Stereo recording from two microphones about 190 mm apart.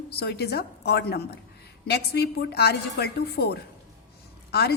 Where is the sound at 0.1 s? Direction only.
60° left (ahead or behind).